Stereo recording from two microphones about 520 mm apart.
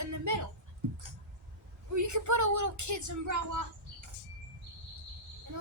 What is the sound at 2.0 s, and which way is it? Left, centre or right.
Speech, right.